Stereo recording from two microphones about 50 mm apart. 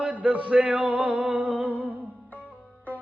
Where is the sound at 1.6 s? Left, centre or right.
Right.